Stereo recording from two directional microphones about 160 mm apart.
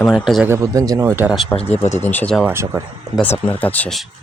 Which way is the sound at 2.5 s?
15° right (ahead or behind).